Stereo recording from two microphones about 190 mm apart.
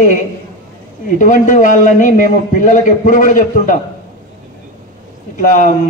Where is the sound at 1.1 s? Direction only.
40° left (ahead or behind).